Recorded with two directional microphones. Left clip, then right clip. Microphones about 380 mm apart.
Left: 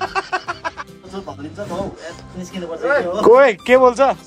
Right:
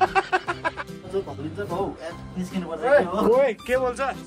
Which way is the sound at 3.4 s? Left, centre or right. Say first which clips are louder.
Left 11 dB; left.